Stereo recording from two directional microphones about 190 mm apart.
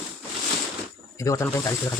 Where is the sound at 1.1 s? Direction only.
15° left (ahead or behind).